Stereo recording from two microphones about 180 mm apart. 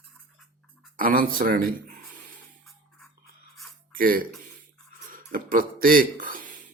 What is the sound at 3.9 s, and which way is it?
Speech, 50° right (ahead or behind).